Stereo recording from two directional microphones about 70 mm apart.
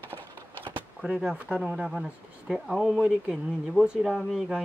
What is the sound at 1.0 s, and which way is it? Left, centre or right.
Speech, centre.